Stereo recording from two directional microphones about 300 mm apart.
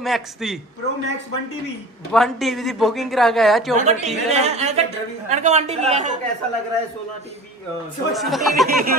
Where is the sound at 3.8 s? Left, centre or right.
Right.